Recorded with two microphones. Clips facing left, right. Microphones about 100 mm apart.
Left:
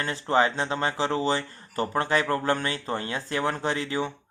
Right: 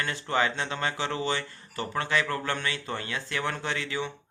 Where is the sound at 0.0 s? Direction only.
35° left (ahead or behind).